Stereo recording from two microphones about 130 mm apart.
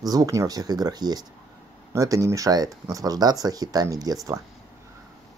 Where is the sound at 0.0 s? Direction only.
30° right (ahead or behind).